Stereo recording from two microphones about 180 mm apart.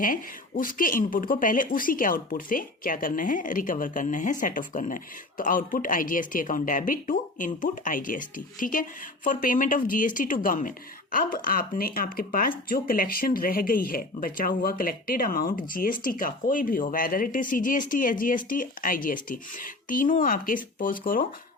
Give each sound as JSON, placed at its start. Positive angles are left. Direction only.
{"t": 0.0, "sound": "speech", "side_deg": 50}